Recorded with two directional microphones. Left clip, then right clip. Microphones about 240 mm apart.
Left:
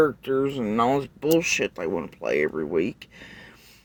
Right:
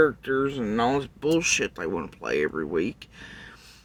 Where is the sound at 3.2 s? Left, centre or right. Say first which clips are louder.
Right 1 dB; right.